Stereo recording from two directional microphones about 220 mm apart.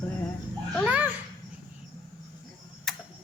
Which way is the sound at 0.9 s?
5° right (ahead or behind).